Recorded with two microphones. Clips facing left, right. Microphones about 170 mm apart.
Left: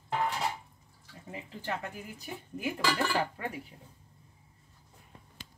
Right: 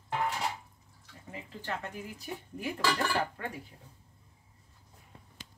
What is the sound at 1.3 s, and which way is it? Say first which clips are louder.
Speech: left 2 dB; 15° left (ahead or behind).